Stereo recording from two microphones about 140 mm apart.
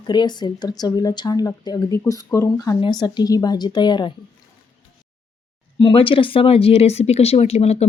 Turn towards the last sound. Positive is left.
turn(degrees=50)  # may be behind; listen again after turning